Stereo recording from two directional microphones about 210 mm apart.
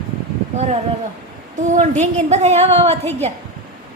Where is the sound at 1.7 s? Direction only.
35° right (ahead or behind).